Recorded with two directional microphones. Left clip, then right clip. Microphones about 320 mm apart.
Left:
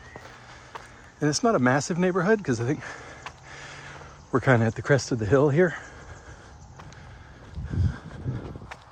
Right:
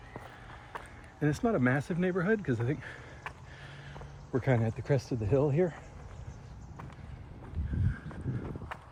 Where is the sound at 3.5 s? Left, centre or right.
Left.